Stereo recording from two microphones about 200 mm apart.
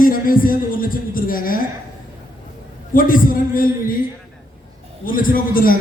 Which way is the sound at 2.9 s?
45° left (ahead or behind).